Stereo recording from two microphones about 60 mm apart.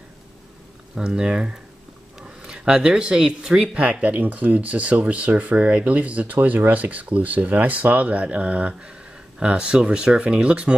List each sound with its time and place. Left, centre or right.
0.9 s speech: centre
3.7 s speech: right